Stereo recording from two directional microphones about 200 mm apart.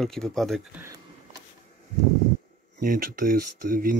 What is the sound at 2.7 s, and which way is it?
Speech, 45° right (ahead or behind).